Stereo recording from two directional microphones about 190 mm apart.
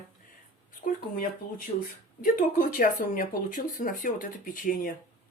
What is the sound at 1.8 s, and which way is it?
Speech, 45° left (ahead or behind).